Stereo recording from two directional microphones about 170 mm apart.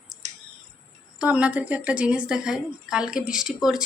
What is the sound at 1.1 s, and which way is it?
A woman's voice, 10° right (ahead or behind).